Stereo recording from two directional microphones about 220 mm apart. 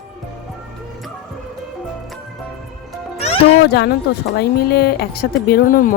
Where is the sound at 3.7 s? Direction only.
45° left (ahead or behind).